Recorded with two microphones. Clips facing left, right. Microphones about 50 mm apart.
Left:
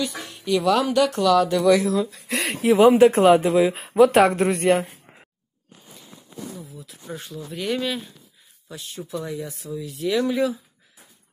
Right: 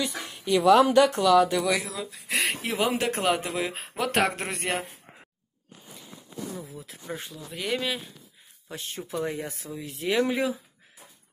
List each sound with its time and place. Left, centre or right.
0.2 s a sound: centre
0.6 s speech: right
1.2 s speech: centre
2.7 s speech: left
3.5 s speech: centre
6.6 s speech: right
7.1 s speech: centre
7.3 s speech: centre
8.6 s speech: right
10.1 s speech: right